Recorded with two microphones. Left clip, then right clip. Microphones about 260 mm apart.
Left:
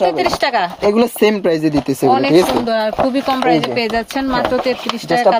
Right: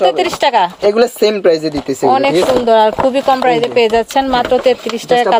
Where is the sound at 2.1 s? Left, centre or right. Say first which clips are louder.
Right 2 dB; centre.